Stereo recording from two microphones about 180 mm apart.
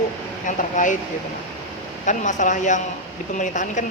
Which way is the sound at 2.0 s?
45° left (ahead or behind).